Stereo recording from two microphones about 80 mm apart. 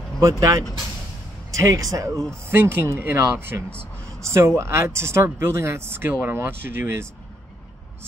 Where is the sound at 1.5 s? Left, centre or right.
Right.